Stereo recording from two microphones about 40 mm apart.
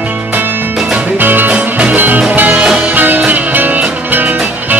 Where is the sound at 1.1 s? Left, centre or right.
Right.